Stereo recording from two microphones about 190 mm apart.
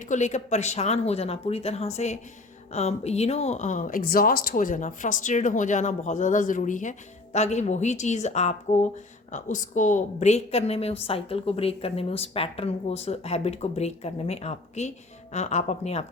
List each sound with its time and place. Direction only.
0.0 s a woman's voice: 40° left (ahead or behind)